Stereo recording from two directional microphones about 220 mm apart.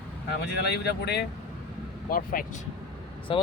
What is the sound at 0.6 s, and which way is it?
Speech, 50° left (ahead or behind).